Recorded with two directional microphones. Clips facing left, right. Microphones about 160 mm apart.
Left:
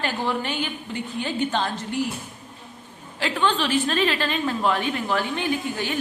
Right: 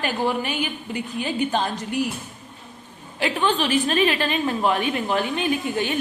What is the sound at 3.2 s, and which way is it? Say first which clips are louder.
A woman's voice: right 1 dB; 15° right (ahead or behind).